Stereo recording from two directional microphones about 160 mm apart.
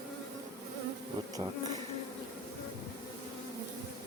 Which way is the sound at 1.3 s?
25° right (ahead or behind).